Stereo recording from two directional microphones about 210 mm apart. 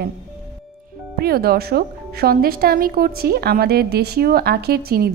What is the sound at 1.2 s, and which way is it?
A woman's voice, 50° right (ahead or behind).